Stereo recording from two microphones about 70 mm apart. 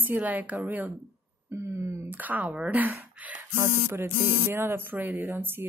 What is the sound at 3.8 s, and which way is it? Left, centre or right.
Speech, right.